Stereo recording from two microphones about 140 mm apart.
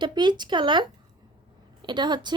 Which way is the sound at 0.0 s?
30° right (ahead or behind).